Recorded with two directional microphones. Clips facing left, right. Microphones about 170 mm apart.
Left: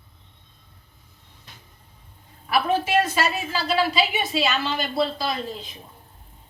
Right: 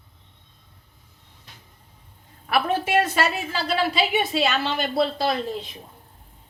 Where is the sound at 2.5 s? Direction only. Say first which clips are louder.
Even; 60° right (ahead or behind).